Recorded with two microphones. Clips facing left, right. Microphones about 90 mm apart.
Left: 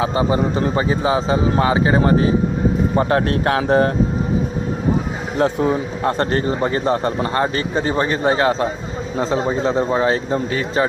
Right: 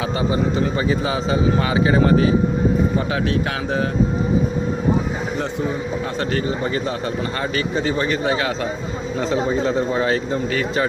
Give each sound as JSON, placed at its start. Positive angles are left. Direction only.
{"t": 0.0, "sound": "speech", "side_deg": 30}
{"t": 2.9, "sound": "speech", "side_deg": 45}
{"t": 5.4, "sound": "speech", "side_deg": 60}
{"t": 6.1, "sound": "speech", "side_deg": 45}